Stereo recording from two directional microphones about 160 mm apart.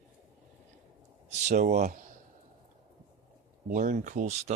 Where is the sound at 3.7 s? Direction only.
55° right (ahead or behind).